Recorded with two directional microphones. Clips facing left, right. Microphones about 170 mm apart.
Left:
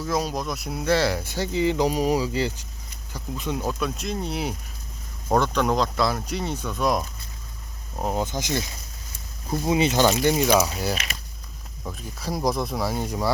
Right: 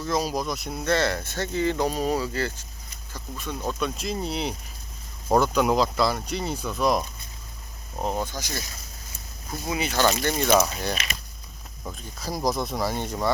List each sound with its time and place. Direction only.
0.0 s speech: centre (ahead or behind)
8.1 s speech: 20° left (ahead or behind)
10.1 s speech: 10° left (ahead or behind)